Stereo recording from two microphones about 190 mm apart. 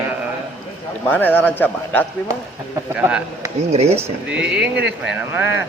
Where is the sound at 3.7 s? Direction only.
35° right (ahead or behind).